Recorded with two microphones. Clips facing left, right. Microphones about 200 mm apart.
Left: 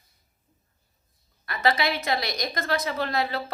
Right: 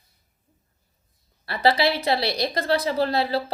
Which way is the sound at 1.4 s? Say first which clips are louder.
Right 4 dB; 30° right (ahead or behind).